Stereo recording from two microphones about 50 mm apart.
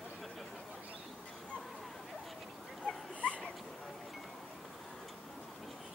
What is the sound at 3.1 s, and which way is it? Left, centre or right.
Dog, left.